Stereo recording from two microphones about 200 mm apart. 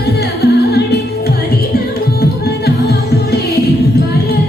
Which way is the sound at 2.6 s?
55° left (ahead or behind).